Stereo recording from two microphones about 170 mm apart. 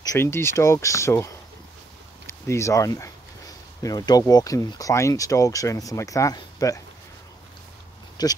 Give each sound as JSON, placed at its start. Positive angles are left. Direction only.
{"t": 0.0, "sound": "speech", "side_deg": 15}
{"t": 2.2, "sound": "a sound", "side_deg": 15}
{"t": 4.3, "sound": "speech", "side_deg": 20}
{"t": 8.2, "sound": "speech", "side_deg": 25}